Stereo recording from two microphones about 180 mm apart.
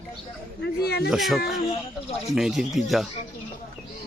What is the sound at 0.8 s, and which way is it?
Speech, 60° left (ahead or behind).